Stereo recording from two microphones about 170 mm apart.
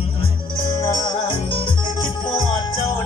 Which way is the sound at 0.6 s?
20° left (ahead or behind).